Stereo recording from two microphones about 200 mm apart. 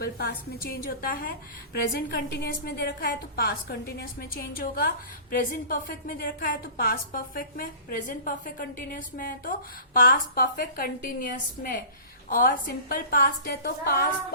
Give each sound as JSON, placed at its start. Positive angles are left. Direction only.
{"t": 0.0, "sound": "a woman's voice", "side_deg": 50}